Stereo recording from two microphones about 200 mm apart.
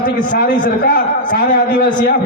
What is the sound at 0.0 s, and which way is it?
A man's voice, 40° left (ahead or behind).